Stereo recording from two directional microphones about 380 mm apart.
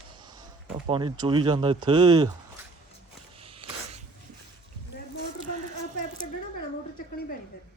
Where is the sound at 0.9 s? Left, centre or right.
Centre.